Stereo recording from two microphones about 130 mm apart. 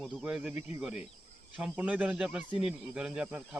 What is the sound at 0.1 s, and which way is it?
Cricket, 5° right (ahead or behind).